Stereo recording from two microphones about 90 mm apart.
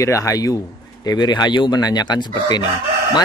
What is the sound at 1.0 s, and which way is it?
A man's voice, 50° left (ahead or behind).